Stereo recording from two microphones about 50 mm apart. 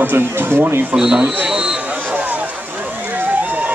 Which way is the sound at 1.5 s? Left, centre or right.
Centre.